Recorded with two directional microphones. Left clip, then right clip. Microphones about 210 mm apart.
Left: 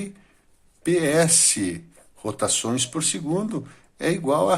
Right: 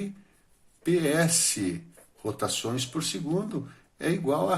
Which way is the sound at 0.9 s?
30° left (ahead or behind).